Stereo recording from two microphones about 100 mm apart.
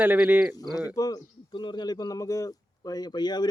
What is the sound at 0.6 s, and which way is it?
Speech, 40° left (ahead or behind).